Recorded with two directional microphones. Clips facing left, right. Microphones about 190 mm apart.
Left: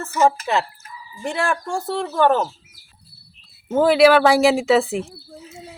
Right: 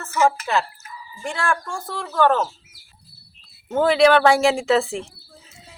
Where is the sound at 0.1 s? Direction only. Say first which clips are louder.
Left 1 dB; 20° left (ahead or behind).